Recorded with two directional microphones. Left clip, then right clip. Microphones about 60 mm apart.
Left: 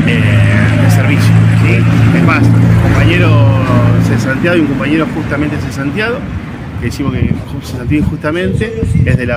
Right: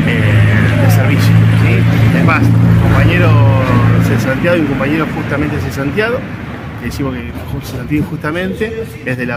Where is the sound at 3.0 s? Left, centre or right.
Right.